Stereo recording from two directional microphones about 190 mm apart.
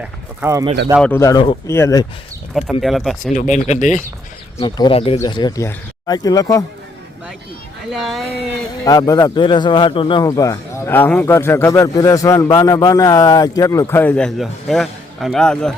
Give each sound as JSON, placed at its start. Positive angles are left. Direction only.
{"t": 0.4, "sound": "speech", "side_deg": -15}
{"t": 1.0, "sound": "a man's voice", "side_deg": 15}
{"t": 2.5, "sound": "speech", "side_deg": 0}
{"t": 3.3, "sound": "speech", "side_deg": 40}
{"t": 4.6, "sound": "speech", "side_deg": 25}
{"t": 7.9, "sound": "speech", "side_deg": 0}
{"t": 8.8, "sound": "a man's voice", "side_deg": 20}